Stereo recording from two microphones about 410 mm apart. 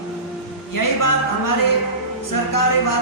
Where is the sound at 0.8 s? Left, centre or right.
Left.